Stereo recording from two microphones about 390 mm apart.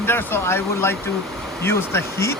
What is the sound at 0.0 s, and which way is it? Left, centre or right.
Speech, centre.